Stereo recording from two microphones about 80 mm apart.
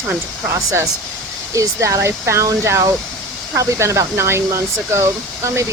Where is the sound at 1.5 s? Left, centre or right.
Right.